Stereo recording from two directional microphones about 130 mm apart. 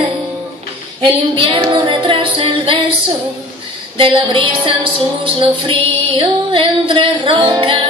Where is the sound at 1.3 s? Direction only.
40° right (ahead or behind).